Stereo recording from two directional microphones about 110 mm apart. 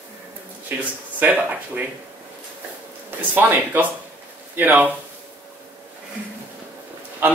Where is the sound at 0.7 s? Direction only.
15° right (ahead or behind).